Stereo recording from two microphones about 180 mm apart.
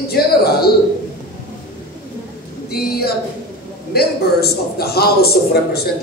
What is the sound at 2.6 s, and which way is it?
A woman's voice, 60° left (ahead or behind).